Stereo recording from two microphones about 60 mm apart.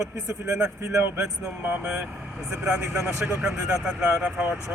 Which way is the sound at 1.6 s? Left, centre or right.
Right.